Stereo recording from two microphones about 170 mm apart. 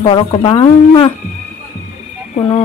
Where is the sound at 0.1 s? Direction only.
30° left (ahead or behind).